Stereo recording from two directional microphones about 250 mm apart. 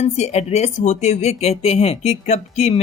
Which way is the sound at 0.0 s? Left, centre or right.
Left.